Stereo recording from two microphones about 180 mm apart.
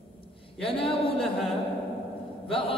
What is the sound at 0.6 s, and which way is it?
Speech, 30° left (ahead or behind).